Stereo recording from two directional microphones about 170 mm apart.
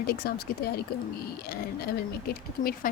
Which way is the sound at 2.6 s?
60° left (ahead or behind).